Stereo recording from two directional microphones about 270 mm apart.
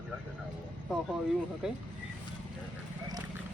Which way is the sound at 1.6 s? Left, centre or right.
Centre.